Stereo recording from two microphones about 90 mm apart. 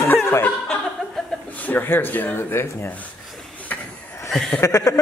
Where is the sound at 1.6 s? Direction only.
20° left (ahead or behind).